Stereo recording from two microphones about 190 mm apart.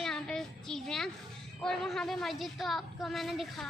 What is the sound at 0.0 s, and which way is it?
Child singing, centre (ahead or behind).